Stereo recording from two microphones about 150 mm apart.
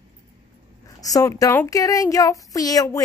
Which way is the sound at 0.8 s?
20° left (ahead or behind).